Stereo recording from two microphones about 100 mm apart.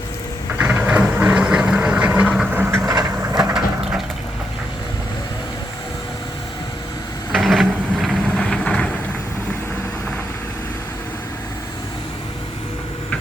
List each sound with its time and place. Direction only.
0.6 s vehicle: 15° right (ahead or behind)
2.6 s vehicle: 25° right (ahead or behind)
7.3 s a sound: centre (ahead or behind)
8.4 s vehicle: 5° left (ahead or behind)